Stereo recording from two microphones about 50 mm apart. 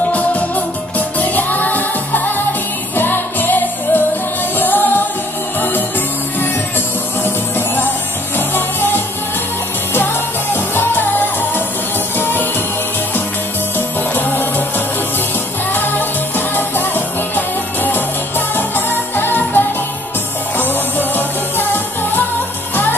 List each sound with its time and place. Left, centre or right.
0.1 s music: left
7.2 s music: left
13.7 s music: left
15.7 s music: left